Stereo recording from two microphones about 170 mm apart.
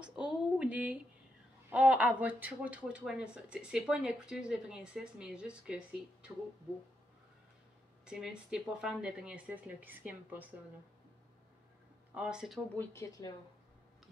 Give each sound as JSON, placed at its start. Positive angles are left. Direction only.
{"t": 0.0, "sound": "speech", "side_deg": -5}
{"t": 8.0, "sound": "speech", "side_deg": -5}
{"t": 12.1, "sound": "speech", "side_deg": -5}
{"t": 12.7, "sound": "speech", "side_deg": 15}